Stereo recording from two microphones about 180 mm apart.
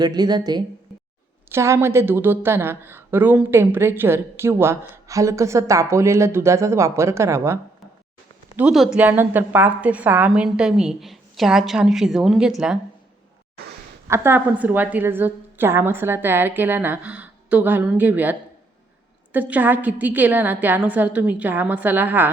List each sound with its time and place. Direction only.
0.0 s a woman's voice: 25° right (ahead or behind)
8.5 s a woman's voice: 5° right (ahead or behind)
14.1 s a woman's voice: 10° right (ahead or behind)